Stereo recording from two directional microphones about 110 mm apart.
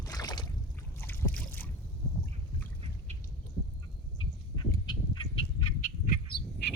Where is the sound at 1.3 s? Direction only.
15° left (ahead or behind).